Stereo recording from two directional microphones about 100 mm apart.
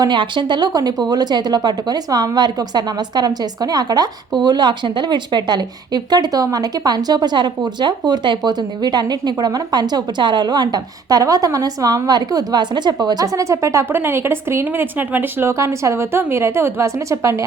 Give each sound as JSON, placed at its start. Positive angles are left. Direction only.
{"t": 0.0, "sound": "a woman's voice", "side_deg": -50}